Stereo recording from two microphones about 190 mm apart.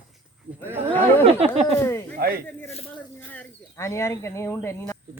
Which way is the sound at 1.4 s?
30° right (ahead or behind).